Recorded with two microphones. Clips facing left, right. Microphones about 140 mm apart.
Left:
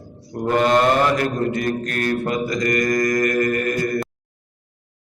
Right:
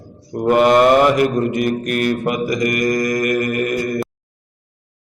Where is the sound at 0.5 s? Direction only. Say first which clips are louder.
Right 5 dB; 10° right (ahead or behind).